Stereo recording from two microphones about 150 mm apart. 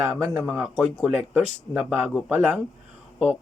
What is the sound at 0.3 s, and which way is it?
Speech, 5° right (ahead or behind).